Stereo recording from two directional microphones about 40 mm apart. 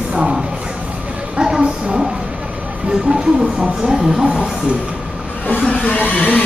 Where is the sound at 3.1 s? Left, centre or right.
Right.